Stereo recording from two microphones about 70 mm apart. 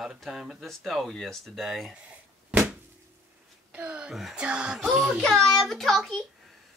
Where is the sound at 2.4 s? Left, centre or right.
Centre.